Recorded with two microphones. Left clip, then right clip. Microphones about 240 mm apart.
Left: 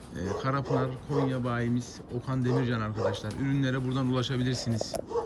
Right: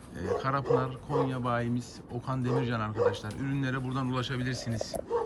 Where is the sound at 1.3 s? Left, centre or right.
Centre.